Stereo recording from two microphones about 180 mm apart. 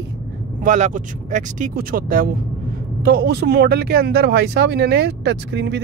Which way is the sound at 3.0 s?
60° right (ahead or behind).